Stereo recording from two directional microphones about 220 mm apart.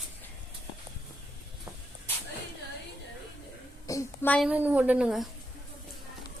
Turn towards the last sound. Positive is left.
turn(degrees=0)  # may be behind; listen again after turning